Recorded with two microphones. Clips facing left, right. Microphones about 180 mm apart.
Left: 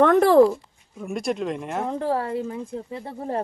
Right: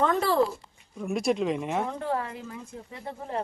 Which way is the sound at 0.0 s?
55° left (ahead or behind).